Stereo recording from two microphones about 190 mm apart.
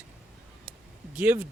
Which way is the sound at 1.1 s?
10° right (ahead or behind).